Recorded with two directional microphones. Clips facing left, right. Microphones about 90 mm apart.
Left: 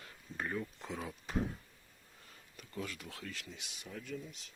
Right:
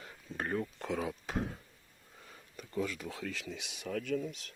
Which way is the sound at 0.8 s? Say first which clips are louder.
Right 7 dB; 75° right (ahead or behind).